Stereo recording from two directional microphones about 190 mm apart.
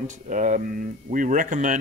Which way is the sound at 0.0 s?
40° right (ahead or behind).